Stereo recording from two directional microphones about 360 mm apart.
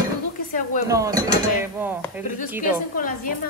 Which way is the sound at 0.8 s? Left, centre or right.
Centre.